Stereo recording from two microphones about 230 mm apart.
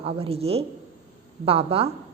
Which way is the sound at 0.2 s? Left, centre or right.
Right.